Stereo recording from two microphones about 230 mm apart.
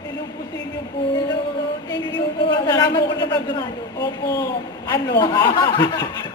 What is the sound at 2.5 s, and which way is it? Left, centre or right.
A man's voice, centre.